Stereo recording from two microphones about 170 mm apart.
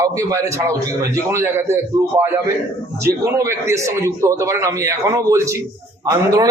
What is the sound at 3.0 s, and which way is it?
A man's voice, 15° right (ahead or behind).